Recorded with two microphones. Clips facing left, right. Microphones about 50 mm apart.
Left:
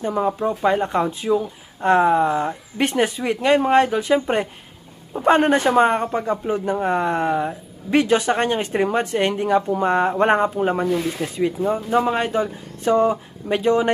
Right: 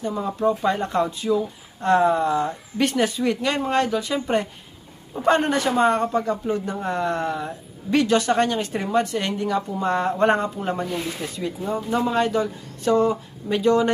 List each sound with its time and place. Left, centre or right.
0.4 s a man's voice: left